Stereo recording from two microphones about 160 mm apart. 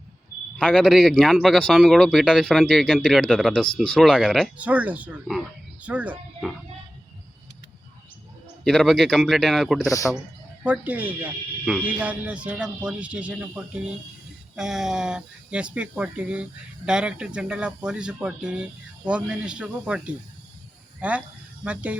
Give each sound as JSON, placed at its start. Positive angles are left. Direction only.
{"t": 0.5, "sound": "speech", "side_deg": 5}
{"t": 8.6, "sound": "speech", "side_deg": 0}
{"t": 9.9, "sound": "a man's voice", "side_deg": 20}
{"t": 10.6, "sound": "speech", "side_deg": -10}